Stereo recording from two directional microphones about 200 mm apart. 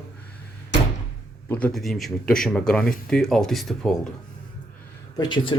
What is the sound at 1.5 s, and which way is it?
Speech, 5° left (ahead or behind).